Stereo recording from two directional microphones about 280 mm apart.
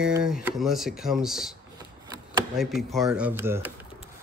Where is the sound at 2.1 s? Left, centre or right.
Centre.